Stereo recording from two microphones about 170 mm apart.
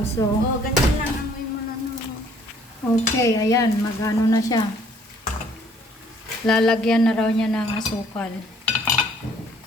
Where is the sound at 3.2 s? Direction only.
20° left (ahead or behind).